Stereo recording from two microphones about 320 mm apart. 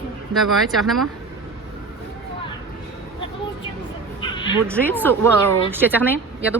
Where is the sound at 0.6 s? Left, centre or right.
Centre.